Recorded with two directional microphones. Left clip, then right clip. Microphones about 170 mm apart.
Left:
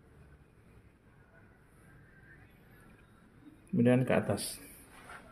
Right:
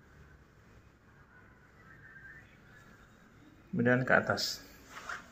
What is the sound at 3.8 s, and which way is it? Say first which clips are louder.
Speech: left 1 dB; 75° left (ahead or behind).